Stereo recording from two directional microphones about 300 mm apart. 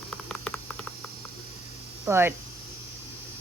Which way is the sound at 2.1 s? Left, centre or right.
Centre.